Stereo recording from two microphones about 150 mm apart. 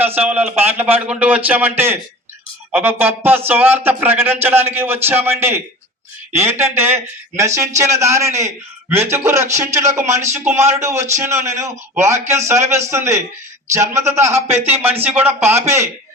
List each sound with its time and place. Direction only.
0.0 s a man's voice: 15° right (ahead or behind)